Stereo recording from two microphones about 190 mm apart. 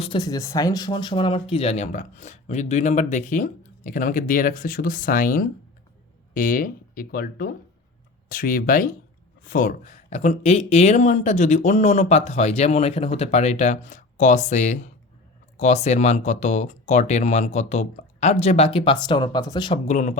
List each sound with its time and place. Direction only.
0.0 s speech: 25° left (ahead or behind)
19.9 s speech: 40° left (ahead or behind)